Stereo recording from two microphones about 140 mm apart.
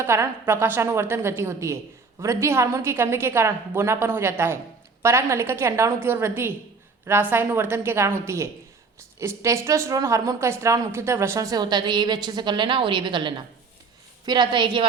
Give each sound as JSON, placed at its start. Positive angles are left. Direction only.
{"t": 0.0, "sound": "a woman's voice", "side_deg": -20}
{"t": 9.1, "sound": "a woman's voice", "side_deg": -20}